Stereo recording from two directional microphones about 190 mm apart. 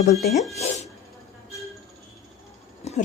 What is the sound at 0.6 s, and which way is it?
Speech, 35° left (ahead or behind).